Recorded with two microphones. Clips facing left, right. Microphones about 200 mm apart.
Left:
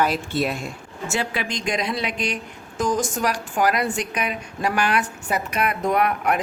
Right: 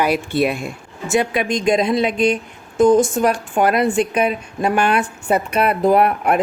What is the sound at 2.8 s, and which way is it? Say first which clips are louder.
Speech: right 10 dB; 55° right (ahead or behind).